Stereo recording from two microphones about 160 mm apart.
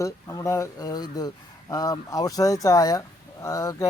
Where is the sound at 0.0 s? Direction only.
20° left (ahead or behind).